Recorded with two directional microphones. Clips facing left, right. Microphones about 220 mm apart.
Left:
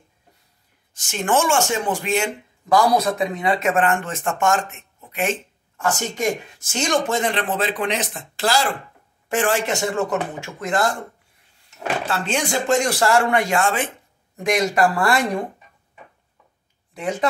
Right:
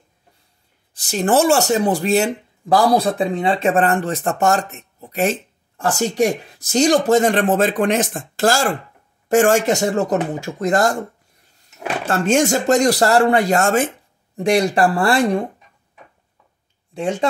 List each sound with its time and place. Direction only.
0.9 s speech: 35° right (ahead or behind)
12.1 s speech: 45° right (ahead or behind)
16.9 s speech: 30° right (ahead or behind)